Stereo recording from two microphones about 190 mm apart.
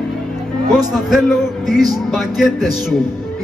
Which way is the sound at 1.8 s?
Centre (ahead or behind).